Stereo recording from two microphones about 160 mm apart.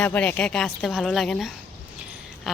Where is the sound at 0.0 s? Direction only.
10° left (ahead or behind).